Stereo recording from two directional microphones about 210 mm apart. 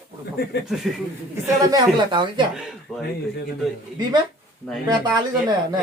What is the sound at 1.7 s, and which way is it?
Speech, 20° right (ahead or behind).